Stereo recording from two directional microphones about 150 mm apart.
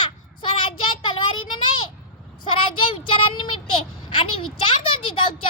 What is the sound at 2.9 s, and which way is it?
Child singing, 35° left (ahead or behind).